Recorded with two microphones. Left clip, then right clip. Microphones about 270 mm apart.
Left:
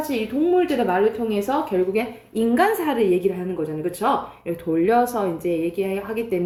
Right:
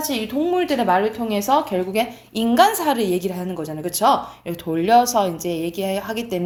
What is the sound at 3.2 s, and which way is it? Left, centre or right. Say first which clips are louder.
Speech: left 3 dB; right.